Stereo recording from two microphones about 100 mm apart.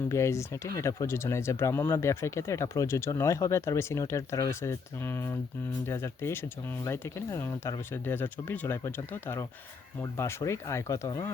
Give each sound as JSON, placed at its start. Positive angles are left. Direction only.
{"t": 0.1, "sound": "speech", "side_deg": 30}